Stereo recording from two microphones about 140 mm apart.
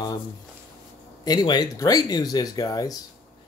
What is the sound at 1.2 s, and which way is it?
Speech, 30° left (ahead or behind).